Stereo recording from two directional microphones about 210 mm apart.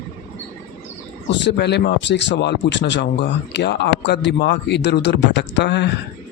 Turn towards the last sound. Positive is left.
turn(degrees=55)  # may be behind; listen again after turning